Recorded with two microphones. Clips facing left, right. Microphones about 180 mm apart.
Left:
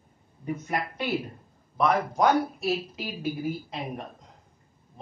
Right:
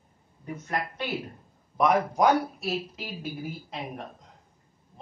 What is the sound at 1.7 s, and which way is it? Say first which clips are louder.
Speech: right 1 dB; 10° right (ahead or behind).